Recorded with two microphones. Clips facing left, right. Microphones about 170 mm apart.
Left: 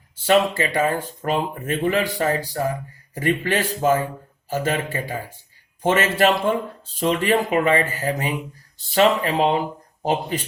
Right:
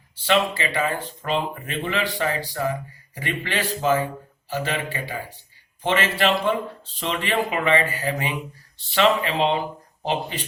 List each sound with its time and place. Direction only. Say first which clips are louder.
0.3 s speech: left 4 dB; 45° left (ahead or behind)